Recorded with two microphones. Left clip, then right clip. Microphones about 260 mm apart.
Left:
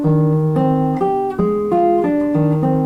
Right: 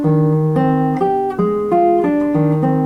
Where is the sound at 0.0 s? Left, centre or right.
Centre.